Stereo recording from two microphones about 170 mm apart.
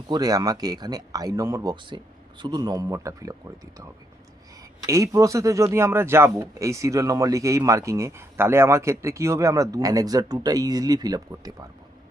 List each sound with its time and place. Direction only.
0.1 s speech: 20° right (ahead or behind)
4.9 s speech: 20° right (ahead or behind)